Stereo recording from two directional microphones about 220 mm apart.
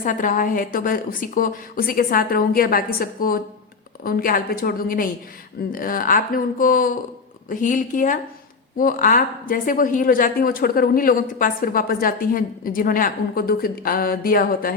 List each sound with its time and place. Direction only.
0.0 s a woman's voice: 35° left (ahead or behind)